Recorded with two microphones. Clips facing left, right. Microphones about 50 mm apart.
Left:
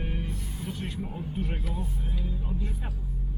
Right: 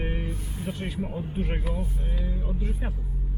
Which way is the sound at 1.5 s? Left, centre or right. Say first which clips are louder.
Right 4 dB; right.